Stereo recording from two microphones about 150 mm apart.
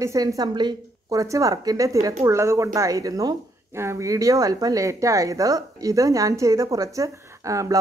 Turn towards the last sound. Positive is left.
turn(degrees=-20)  # may be behind; listen again after turning